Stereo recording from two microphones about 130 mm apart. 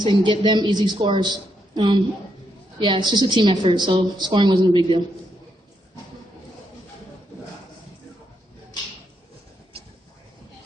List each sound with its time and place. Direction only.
0.0 s a woman's voice: 35° right (ahead or behind)